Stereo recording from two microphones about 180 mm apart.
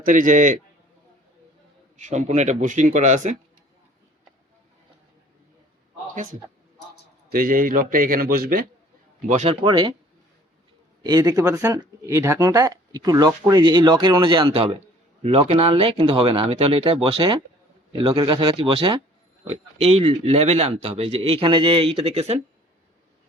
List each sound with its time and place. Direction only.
0.0 s a man's voice: 50° right (ahead or behind)
2.0 s speech: 40° right (ahead or behind)
7.3 s a man's voice: 55° right (ahead or behind)
9.2 s speech: 40° right (ahead or behind)
9.6 s speech: 25° right (ahead or behind)
11.0 s speech: 20° right (ahead or behind)